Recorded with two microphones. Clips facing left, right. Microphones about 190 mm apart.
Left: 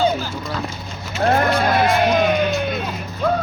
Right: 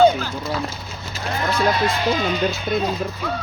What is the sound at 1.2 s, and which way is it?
Speech, 60° left (ahead or behind).